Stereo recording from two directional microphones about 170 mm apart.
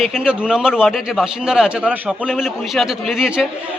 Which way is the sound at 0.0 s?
5° right (ahead or behind).